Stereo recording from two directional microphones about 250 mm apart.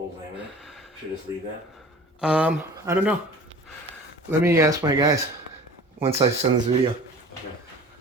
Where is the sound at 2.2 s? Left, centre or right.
Centre.